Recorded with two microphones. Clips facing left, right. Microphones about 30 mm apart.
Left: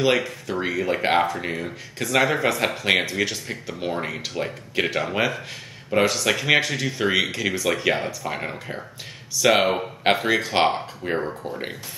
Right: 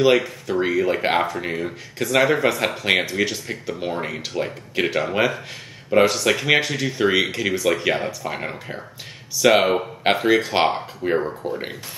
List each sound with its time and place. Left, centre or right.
0.0 s speech: centre